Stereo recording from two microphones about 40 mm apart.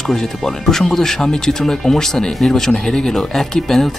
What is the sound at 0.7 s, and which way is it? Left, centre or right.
Speech, centre.